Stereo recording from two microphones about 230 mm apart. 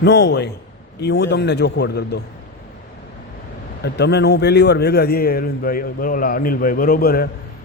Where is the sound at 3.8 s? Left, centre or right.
Left.